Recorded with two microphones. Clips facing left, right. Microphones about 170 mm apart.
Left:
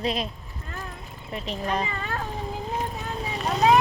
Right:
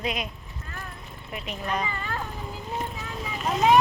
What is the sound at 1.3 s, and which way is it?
Speech, 30° left (ahead or behind).